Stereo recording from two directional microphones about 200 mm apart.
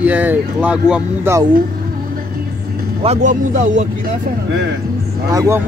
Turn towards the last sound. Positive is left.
turn(degrees=-15)  # may be behind; listen again after turning